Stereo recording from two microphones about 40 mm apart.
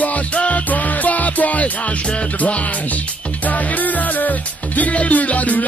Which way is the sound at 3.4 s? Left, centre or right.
Left.